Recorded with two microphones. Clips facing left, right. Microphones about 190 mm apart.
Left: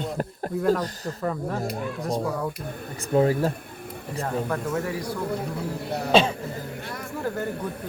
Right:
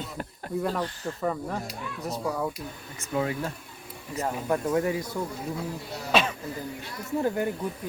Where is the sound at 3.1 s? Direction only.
45° left (ahead or behind).